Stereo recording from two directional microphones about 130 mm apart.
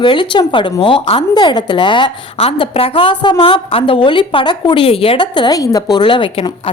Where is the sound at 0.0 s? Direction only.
40° left (ahead or behind).